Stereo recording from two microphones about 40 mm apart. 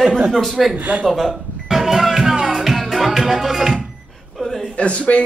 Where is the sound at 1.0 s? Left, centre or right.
Centre.